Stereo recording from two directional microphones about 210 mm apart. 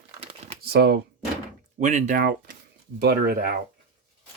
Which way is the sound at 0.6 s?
50° right (ahead or behind).